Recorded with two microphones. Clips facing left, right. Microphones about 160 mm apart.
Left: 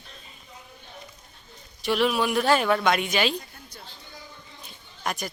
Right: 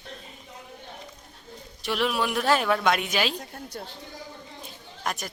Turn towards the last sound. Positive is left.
turn(degrees=0)  # may be behind; listen again after turning